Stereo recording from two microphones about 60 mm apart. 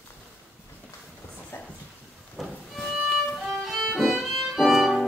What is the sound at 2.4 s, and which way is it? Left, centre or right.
Music, centre.